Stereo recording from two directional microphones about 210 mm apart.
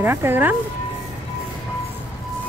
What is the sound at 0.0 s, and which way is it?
Speech, 10° right (ahead or behind).